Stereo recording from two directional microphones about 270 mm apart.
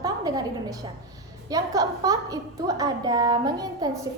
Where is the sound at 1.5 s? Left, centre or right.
Centre.